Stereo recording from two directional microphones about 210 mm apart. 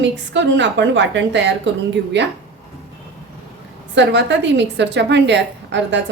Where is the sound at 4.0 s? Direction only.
60° right (ahead or behind).